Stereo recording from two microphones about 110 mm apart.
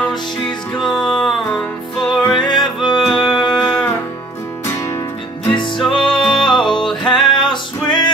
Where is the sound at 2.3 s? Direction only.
40° left (ahead or behind).